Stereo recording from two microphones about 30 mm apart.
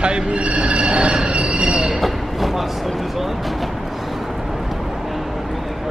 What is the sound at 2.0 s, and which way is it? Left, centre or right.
Train, centre.